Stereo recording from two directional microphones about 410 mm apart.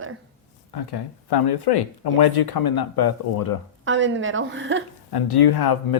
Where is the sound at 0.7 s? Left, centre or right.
Left.